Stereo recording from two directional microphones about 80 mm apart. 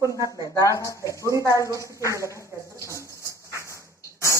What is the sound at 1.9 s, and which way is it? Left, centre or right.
Speech, right.